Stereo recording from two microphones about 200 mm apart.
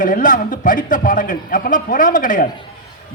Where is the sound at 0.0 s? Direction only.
40° left (ahead or behind).